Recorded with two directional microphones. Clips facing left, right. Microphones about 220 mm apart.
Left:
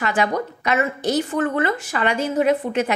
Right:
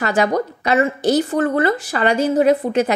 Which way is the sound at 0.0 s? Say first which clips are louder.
Right 4 dB; 40° right (ahead or behind).